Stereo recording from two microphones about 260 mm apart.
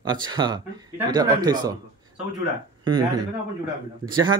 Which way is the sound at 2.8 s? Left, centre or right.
Centre.